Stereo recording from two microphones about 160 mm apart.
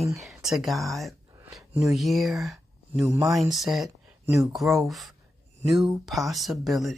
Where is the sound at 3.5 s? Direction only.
Centre (ahead or behind).